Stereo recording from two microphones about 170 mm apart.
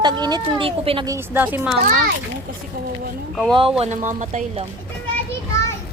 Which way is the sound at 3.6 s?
35° right (ahead or behind).